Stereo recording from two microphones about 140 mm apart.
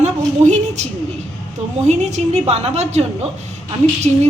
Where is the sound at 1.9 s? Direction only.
55° right (ahead or behind).